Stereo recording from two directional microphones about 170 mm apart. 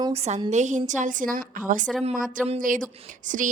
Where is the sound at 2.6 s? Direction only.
50° right (ahead or behind).